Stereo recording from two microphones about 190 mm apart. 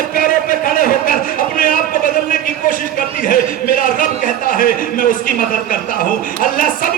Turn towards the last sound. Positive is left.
turn(degrees=45)  # may be behind; listen again after turning